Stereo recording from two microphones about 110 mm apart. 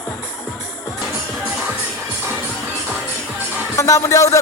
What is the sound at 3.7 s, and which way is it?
Speech, 25° left (ahead or behind).